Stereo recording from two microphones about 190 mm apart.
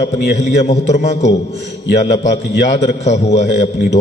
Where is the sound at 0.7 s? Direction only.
35° left (ahead or behind).